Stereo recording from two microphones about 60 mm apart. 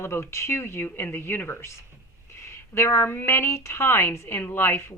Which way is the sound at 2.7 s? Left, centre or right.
Left.